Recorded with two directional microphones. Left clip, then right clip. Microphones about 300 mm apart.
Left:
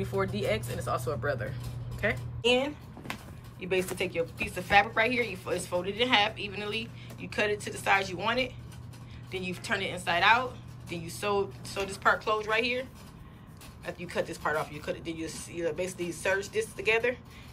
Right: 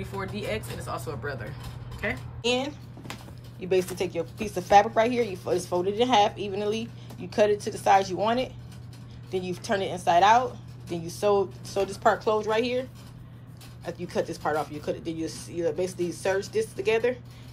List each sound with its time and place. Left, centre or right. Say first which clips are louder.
0.0 s speech: left 3 dB; centre
13.8 s speech: right 3 dB; centre